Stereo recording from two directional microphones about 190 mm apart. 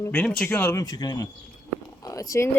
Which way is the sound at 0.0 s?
5° left (ahead or behind).